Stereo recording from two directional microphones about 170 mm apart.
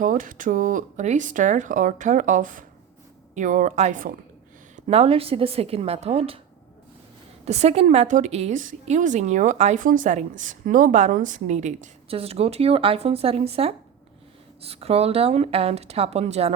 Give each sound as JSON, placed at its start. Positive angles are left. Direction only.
{"t": 0.0, "sound": "a woman's voice", "side_deg": -50}
{"t": 4.9, "sound": "speech", "side_deg": -35}
{"t": 7.4, "sound": "a woman's voice", "side_deg": -40}